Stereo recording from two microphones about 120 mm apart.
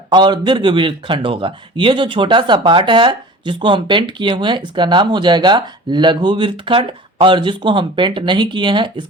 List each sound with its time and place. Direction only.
0.1 s a man's voice: 40° right (ahead or behind)